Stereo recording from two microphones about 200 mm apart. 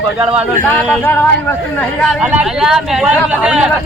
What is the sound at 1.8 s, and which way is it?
Speech, 5° left (ahead or behind).